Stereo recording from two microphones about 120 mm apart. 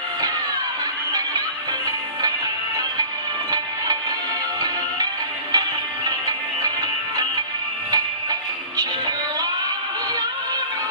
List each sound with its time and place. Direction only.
3.5 s music: 30° right (ahead or behind)
5.5 s music: 35° right (ahead or behind)
7.9 s music: 30° right (ahead or behind)